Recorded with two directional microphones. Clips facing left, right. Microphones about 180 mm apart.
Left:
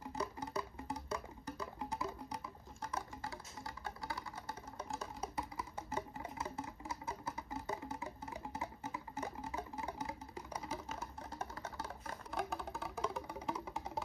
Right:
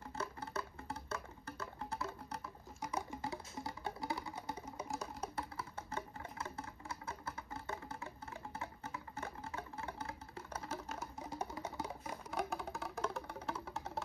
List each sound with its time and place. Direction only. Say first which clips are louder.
0.2 s music: left 2 dB; 15° left (ahead or behind)
2.8 s patter: right 1 dB; 10° right (ahead or behind)
3.2 s music: right 4 dB; 25° right (ahead or behind)
4.7 s wood block: left 2 dB; centre (ahead or behind)
5.6 s music: left 2 dB; 20° left (ahead or behind)
11.0 s music: right 2 dB; 10° right (ahead or behind); by 14.0 s 10° left (ahead or behind)